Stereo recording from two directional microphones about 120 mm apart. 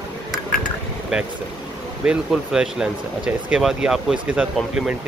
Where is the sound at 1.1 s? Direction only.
10° right (ahead or behind).